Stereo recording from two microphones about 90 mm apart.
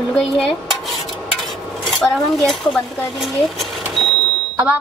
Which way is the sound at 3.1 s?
Centre (ahead or behind).